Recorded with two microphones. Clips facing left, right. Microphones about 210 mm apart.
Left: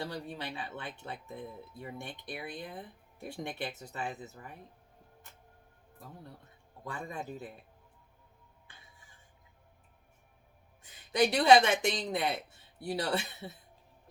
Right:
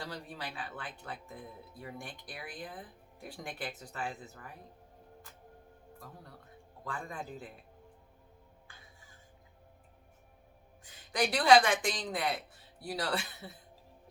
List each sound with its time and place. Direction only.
0.0 s speech: 25° left (ahead or behind)
6.8 s speech: 20° left (ahead or behind)
11.1 s speech: 25° left (ahead or behind)